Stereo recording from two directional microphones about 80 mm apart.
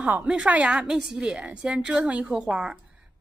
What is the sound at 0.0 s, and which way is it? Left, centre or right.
A woman's voice, centre.